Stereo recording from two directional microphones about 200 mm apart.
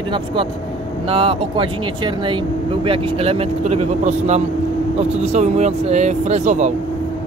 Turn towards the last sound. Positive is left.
turn(degrees=-35)  # may be behind; listen again after turning